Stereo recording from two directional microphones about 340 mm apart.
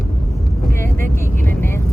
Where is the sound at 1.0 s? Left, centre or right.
Centre.